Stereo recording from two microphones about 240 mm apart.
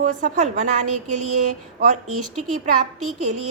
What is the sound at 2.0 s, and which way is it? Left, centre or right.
Speech, right.